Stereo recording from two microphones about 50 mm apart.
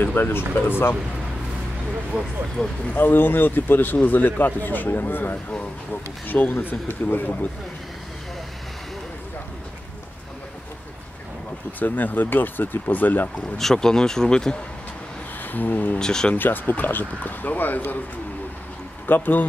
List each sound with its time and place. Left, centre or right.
0.0 s speech: left
2.6 s speech: centre
2.9 s speech: left
11.8 s speech: left
13.6 s speech: centre
15.4 s speech: left
16.0 s speech: centre
16.3 s speech: left
19.0 s speech: left